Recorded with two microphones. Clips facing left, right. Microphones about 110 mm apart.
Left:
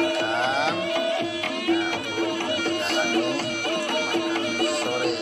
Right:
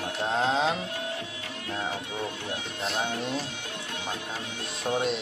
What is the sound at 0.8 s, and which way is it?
Music, 85° left.